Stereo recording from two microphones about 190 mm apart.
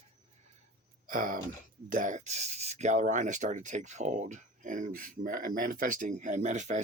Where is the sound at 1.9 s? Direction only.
40° right (ahead or behind).